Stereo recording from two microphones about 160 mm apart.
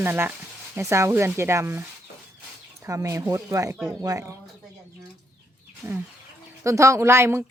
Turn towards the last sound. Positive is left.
turn(degrees=-15)  # may be behind; listen again after turning